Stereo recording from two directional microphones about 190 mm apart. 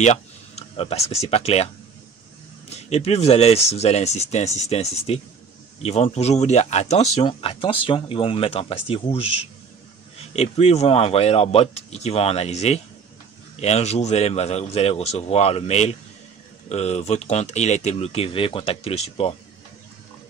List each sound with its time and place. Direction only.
0.0 s speech: 35° left (ahead or behind)
2.7 s speech: 35° left (ahead or behind)